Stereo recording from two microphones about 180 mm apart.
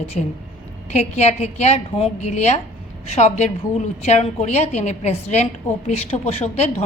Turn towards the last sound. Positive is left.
turn(degrees=35)  # may be behind; listen again after turning